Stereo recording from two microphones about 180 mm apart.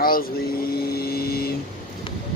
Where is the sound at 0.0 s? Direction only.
55° left (ahead or behind).